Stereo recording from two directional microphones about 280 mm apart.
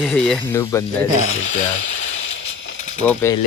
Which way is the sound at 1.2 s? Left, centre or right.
Left.